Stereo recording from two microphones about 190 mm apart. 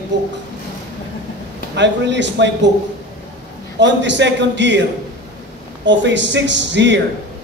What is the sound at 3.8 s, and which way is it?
Speech, 70° right (ahead or behind).